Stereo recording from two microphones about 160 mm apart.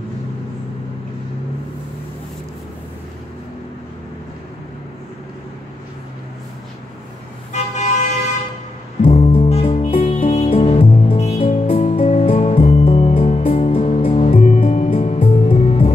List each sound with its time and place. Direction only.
7.5 s vehicle: 45° left (ahead or behind)
9.0 s music: 40° left (ahead or behind)